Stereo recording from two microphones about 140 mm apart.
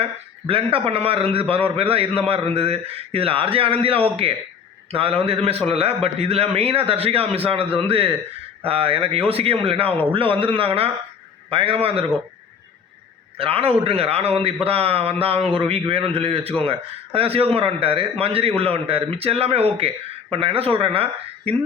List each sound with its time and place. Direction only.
0.0 s a man's voice: 40° right (ahead or behind)
13.3 s a man's voice: 40° right (ahead or behind)